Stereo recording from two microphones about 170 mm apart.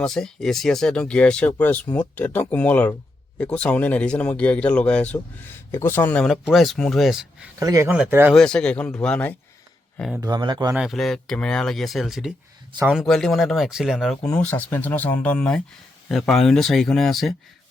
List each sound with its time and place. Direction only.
0.0 s speech: 5° left (ahead or behind)
7.6 s speech: 20° right (ahead or behind)
8.3 s speech: 5° left (ahead or behind)
10.2 s speech: 25° right (ahead or behind)
10.8 s speech: centre (ahead or behind)
14.3 s speech: 10° left (ahead or behind)